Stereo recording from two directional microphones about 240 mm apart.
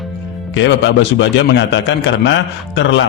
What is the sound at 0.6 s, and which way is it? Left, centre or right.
A man's voice, left.